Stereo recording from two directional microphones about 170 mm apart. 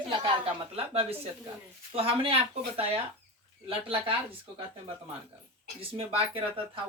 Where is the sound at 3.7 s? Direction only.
35° right (ahead or behind).